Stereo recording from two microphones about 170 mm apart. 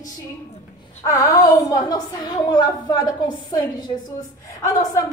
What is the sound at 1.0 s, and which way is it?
A woman's voice, 20° left (ahead or behind).